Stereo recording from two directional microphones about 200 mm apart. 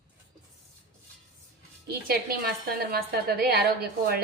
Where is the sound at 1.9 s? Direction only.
50° right (ahead or behind).